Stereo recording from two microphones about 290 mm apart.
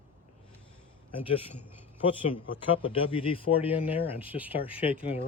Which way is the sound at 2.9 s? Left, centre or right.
Centre.